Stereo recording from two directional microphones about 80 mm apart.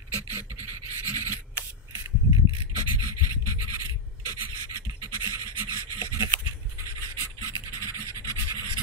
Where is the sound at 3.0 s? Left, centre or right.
Left.